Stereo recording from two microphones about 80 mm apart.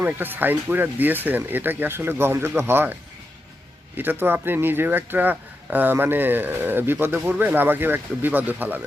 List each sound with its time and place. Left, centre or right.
0.0 s speech: right